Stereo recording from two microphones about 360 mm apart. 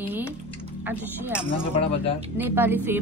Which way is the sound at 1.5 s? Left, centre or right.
Centre.